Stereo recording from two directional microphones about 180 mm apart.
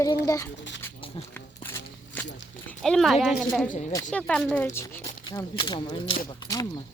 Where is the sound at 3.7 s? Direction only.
45° left (ahead or behind).